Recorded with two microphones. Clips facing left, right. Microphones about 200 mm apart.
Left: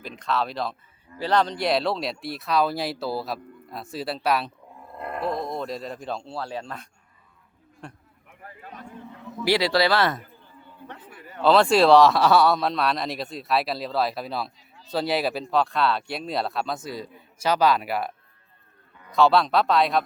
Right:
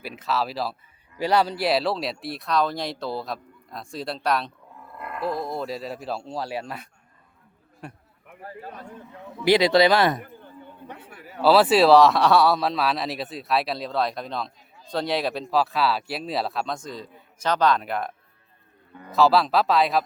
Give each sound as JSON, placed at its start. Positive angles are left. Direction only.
{"t": 0.0, "sound": "speech", "side_deg": -5}
{"t": 4.9, "sound": "speech", "side_deg": 30}
{"t": 5.3, "sound": "speech", "side_deg": 0}
{"t": 8.4, "sound": "a man's voice", "side_deg": -35}
{"t": 9.4, "sound": "speech", "side_deg": -20}
{"t": 10.8, "sound": "a sound", "side_deg": -10}
{"t": 11.3, "sound": "speech", "side_deg": -5}
{"t": 19.1, "sound": "speech", "side_deg": -5}